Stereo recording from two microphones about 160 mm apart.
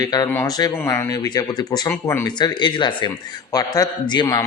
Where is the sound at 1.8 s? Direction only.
15° left (ahead or behind).